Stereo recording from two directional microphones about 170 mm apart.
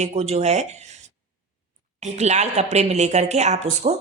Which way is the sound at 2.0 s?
40° right (ahead or behind).